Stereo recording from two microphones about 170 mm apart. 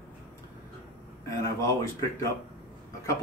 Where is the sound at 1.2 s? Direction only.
20° left (ahead or behind).